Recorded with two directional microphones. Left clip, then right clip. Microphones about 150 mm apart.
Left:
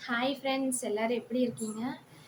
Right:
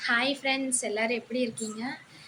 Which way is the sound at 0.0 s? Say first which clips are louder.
Right 5 dB; 10° left (ahead or behind).